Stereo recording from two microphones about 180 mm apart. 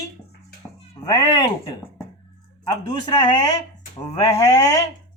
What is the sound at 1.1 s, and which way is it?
Speech, 20° left (ahead or behind).